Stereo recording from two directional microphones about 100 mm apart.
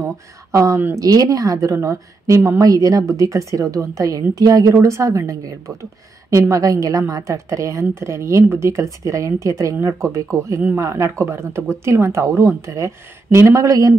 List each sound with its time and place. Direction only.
0.0 s a woman's voice: 30° right (ahead or behind)